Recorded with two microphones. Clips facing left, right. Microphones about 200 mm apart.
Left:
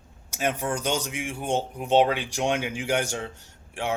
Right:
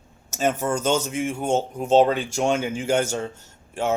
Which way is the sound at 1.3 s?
45° right (ahead or behind).